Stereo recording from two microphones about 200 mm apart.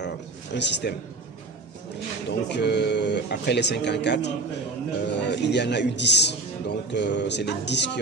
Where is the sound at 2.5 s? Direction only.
55° left (ahead or behind).